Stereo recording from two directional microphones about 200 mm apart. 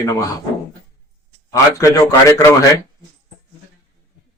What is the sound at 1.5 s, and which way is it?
A man's voice, 15° left (ahead or behind).